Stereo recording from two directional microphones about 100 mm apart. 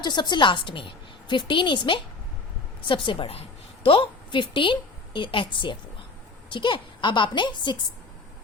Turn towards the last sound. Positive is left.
turn(degrees=50)  # may be behind; listen again after turning